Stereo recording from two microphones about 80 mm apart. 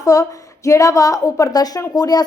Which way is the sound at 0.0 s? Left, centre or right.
Left.